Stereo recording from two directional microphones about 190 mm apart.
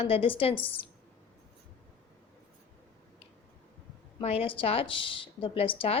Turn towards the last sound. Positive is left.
turn(degrees=30)  # may be behind; listen again after turning